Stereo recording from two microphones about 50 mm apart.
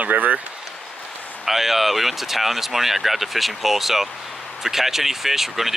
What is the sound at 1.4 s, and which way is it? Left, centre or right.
Speech, centre.